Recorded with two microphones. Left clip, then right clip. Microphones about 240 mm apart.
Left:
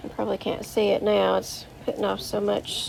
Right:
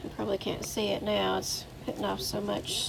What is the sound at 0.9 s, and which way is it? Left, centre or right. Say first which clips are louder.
Speech: left 8 dB; left.